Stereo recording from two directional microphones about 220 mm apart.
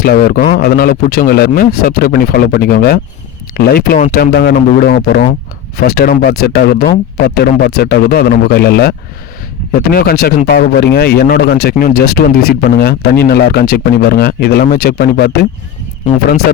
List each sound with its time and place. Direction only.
0.0 s speech: 40° left (ahead or behind)